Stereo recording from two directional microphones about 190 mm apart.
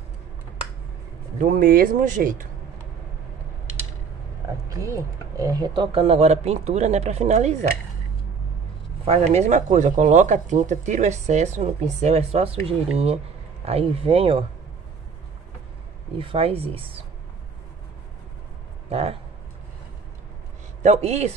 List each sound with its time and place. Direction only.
1.4 s speech: 45° right (ahead or behind)
4.6 s a sound: 20° right (ahead or behind)
5.4 s speech: 20° right (ahead or behind); by 7.5 s 35° right (ahead or behind)
9.0 s speech: 35° right (ahead or behind)
16.2 s speech: 30° right (ahead or behind)
18.9 s speech: 30° right (ahead or behind)
20.8 s speech: 35° right (ahead or behind)